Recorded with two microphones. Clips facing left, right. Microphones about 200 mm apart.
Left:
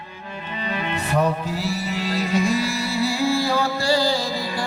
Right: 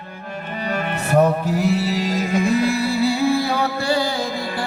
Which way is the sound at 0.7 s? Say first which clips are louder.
Right 5 dB; 50° right (ahead or behind).